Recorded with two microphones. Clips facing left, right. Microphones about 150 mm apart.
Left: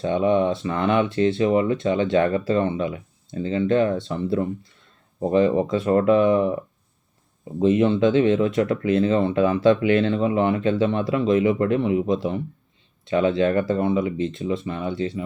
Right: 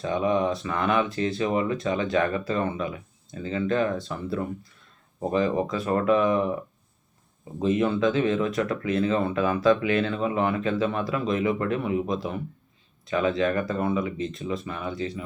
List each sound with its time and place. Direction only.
0.0 s speech: 25° left (ahead or behind)
7.6 s speech: 25° left (ahead or behind)